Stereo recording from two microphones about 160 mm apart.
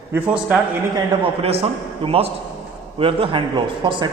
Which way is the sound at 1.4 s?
35° right (ahead or behind).